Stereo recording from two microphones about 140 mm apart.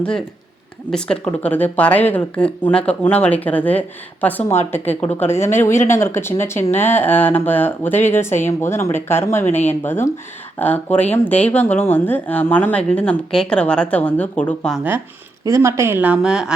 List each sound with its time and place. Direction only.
0.9 s speech: 5° left (ahead or behind)
15.4 s speech: 20° right (ahead or behind); by 16.5 s 5° right (ahead or behind)